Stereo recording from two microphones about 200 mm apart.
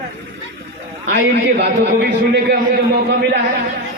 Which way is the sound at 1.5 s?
55° right (ahead or behind).